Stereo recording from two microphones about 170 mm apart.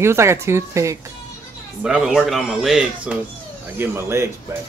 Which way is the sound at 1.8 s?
5° right (ahead or behind).